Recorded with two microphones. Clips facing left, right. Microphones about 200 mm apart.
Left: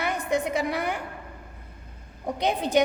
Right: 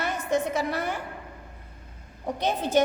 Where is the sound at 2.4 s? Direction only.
15° left (ahead or behind).